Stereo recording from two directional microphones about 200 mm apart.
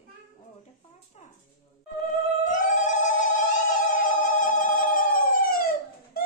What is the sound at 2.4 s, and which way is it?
Cat, 40° left (ahead or behind).